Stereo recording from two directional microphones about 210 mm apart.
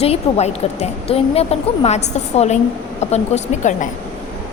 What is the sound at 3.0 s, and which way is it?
Speech, 30° left (ahead or behind).